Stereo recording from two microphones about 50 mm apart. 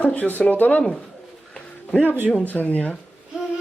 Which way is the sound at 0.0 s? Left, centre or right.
Left.